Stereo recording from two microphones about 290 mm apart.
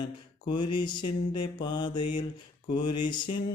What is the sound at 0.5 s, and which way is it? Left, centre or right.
Mantra, centre.